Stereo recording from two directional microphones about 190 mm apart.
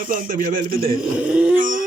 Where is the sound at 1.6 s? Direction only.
45° right (ahead or behind).